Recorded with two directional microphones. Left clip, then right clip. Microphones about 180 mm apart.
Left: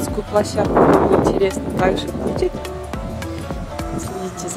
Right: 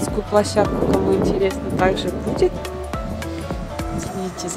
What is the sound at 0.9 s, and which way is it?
Speech, centre (ahead or behind).